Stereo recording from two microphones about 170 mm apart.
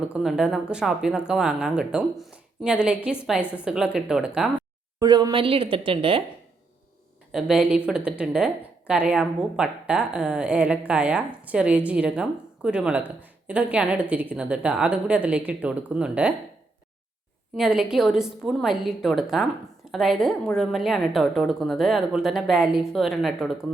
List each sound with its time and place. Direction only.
0.1 s a woman's voice: 5° right (ahead or behind)
4.9 s a woman's voice: 25° right (ahead or behind)
7.3 s a woman's voice: 5° right (ahead or behind)
17.6 s a woman's voice: 5° right (ahead or behind)